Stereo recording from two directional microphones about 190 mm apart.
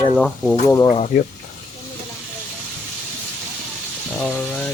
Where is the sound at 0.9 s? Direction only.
30° left (ahead or behind).